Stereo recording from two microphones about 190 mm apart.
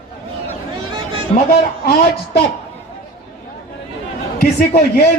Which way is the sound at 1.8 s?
55° left (ahead or behind).